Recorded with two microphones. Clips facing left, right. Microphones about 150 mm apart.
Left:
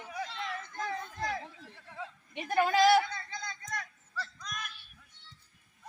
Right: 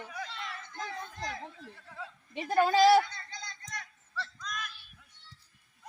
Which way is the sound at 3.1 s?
50° left (ahead or behind).